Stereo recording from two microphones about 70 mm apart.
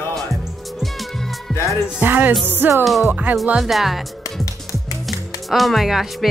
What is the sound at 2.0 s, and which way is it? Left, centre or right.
Music, right.